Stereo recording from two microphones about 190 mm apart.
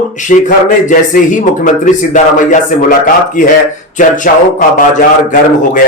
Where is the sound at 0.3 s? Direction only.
40° left (ahead or behind).